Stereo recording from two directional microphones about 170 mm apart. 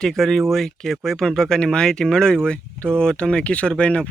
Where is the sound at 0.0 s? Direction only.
Centre (ahead or behind).